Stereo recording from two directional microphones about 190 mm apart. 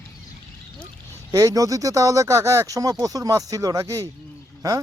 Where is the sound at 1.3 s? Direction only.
20° right (ahead or behind).